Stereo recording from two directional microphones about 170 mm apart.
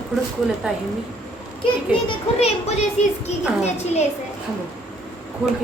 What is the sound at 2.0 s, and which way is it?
Speech, 35° left (ahead or behind).